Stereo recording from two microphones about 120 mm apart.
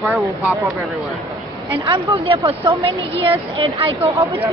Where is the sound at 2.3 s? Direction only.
45° right (ahead or behind).